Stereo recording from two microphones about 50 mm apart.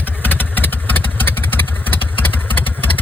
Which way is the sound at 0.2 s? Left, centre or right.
Left.